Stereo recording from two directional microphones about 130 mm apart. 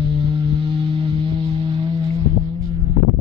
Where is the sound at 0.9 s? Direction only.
40° right (ahead or behind).